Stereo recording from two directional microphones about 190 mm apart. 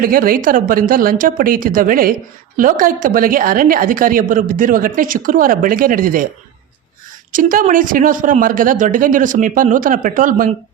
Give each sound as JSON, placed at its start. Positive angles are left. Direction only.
{"t": 0.0, "sound": "a woman's voice", "side_deg": -50}
{"t": 7.3, "sound": "a woman's voice", "side_deg": -45}